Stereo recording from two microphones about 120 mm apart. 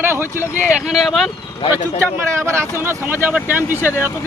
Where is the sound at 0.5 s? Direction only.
10° right (ahead or behind).